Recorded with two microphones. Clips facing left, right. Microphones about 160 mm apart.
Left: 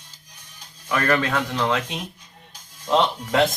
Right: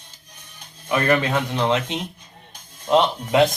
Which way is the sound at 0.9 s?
20° right (ahead or behind).